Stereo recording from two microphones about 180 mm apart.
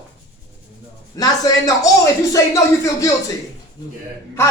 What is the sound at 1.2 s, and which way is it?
A man's voice, 20° left (ahead or behind).